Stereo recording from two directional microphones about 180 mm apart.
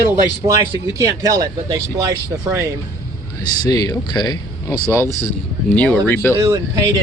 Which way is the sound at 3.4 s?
20° left (ahead or behind).